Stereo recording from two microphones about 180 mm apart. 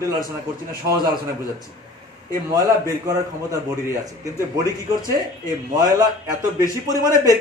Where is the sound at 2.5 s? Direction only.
20° right (ahead or behind).